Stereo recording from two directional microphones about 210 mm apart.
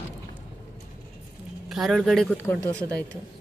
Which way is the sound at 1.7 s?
Centre (ahead or behind).